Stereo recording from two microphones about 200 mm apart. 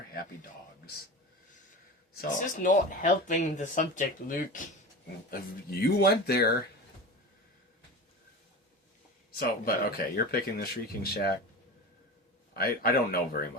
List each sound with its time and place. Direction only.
2.1 s speech: 40° left (ahead or behind)
9.3 s speech: 50° left (ahead or behind)
12.5 s speech: 50° left (ahead or behind)